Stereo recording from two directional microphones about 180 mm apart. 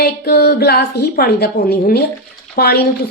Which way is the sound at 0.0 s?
60° left (ahead or behind).